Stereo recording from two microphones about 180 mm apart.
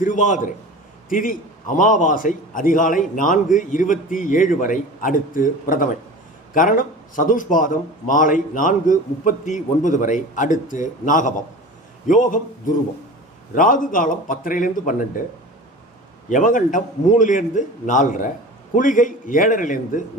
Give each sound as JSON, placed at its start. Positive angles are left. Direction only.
{"t": 0.0, "sound": "a man's voice", "side_deg": 45}
{"t": 13.5, "sound": "a man's voice", "side_deg": 50}
{"t": 16.3, "sound": "a man's voice", "side_deg": 45}